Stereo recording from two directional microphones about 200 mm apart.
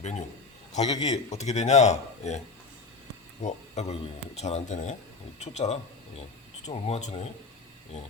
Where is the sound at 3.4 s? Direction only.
35° left (ahead or behind).